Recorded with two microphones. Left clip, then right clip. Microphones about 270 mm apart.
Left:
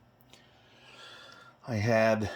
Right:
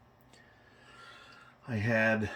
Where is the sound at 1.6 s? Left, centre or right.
Centre.